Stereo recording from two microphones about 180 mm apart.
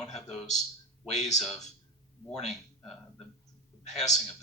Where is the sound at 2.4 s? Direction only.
35° left (ahead or behind).